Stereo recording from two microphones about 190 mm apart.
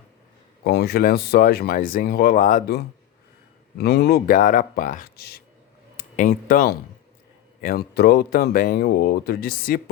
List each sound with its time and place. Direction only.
0.6 s speech: 55° left (ahead or behind)
6.0 s speech: 45° left (ahead or behind)